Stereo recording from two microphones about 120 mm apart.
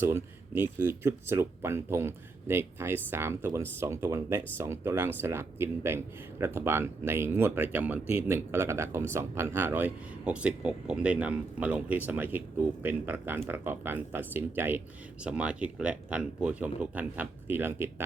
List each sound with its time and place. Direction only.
0.0 s speech: 20° right (ahead or behind)